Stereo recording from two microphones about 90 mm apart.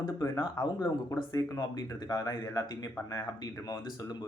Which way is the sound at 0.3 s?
45° left (ahead or behind).